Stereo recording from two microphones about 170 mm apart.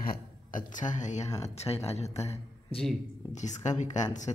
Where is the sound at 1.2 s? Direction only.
20° left (ahead or behind).